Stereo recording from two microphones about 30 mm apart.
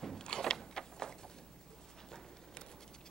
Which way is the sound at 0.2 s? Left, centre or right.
Left.